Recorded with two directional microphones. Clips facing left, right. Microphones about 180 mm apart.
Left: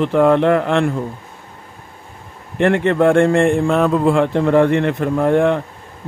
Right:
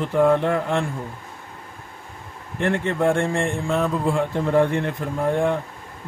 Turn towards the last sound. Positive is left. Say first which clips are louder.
# left 7 dB
turn(degrees=85)